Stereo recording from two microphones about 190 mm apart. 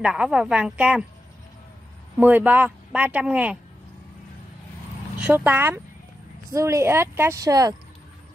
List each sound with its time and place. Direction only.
0.0 s a woman's voice: 5° right (ahead or behind)
2.1 s a woman's voice: 10° right (ahead or behind)
5.2 s a woman's voice: 10° right (ahead or behind)